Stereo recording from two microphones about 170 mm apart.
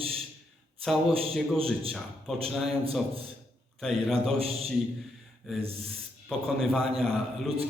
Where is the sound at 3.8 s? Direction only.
Centre (ahead or behind).